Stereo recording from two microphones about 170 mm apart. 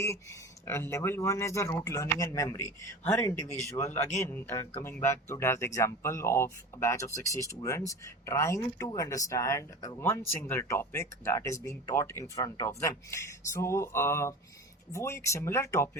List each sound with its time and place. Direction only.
0.0 s speech: 15° left (ahead or behind)